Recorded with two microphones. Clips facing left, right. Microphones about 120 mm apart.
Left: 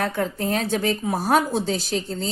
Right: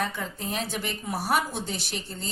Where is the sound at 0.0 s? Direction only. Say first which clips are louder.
Left 7 dB; 75° left (ahead or behind).